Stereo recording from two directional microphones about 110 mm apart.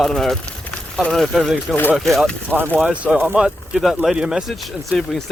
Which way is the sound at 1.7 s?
20° left (ahead or behind).